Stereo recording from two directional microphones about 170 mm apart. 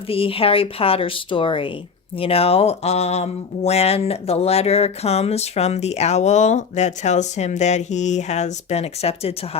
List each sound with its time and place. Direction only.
0.1 s speech: 35° left (ahead or behind)